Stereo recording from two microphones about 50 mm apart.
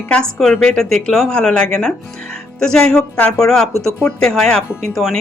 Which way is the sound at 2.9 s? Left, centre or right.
Left.